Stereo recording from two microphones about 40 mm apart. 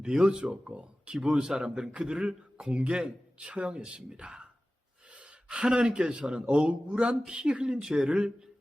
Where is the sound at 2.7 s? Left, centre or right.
Right.